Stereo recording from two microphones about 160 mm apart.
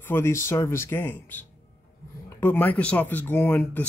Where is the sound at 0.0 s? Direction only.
15° left (ahead or behind).